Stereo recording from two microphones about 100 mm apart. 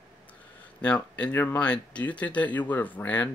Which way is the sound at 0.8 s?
15° left (ahead or behind).